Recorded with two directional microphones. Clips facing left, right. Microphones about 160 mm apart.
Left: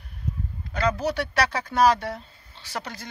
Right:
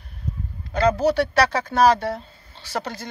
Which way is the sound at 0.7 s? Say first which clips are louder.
Right 6 dB; 30° right (ahead or behind).